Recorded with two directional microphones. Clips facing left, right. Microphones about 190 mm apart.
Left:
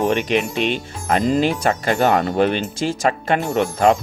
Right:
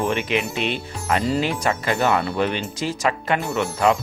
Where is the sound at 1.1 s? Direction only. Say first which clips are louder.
Left 4 dB; 45° left (ahead or behind).